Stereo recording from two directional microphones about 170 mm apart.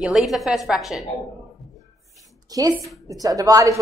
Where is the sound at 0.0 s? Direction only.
Centre (ahead or behind).